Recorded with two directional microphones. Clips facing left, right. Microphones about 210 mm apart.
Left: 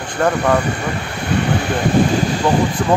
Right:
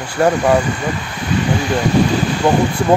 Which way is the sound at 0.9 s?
60° left (ahead or behind).